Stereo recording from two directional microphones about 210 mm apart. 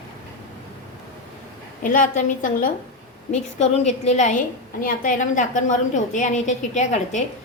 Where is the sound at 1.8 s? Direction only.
40° left (ahead or behind).